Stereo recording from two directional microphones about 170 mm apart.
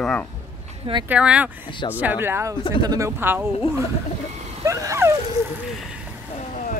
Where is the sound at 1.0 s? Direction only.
5° right (ahead or behind).